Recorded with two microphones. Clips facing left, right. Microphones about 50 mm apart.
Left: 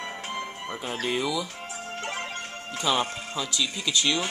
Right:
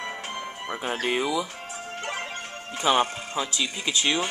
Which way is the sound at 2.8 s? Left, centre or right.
Right.